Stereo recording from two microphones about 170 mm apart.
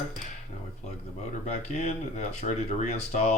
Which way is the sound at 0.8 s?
40° left (ahead or behind).